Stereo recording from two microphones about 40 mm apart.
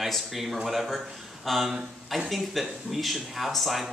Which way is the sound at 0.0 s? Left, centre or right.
Centre.